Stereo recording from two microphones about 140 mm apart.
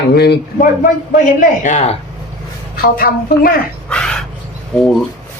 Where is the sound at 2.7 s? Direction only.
90° left.